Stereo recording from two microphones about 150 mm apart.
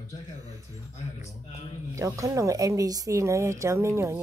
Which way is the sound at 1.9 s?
20° right (ahead or behind).